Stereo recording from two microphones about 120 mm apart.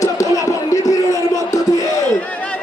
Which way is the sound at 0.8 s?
30° left (ahead or behind).